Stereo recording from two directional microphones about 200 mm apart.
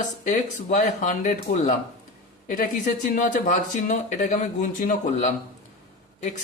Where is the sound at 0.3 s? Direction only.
35° left (ahead or behind).